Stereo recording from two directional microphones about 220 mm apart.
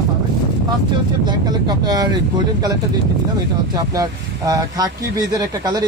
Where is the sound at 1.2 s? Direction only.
20° right (ahead or behind).